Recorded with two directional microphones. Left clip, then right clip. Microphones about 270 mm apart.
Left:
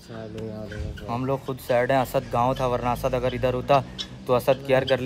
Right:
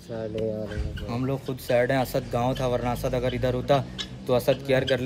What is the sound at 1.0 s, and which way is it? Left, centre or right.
Speech, centre.